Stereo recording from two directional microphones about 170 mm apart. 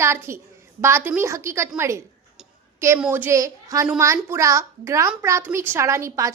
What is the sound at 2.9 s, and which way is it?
A woman's voice, 10° right (ahead or behind).